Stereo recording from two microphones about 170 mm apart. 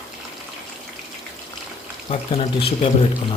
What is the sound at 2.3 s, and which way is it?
Speech, 35° left (ahead or behind).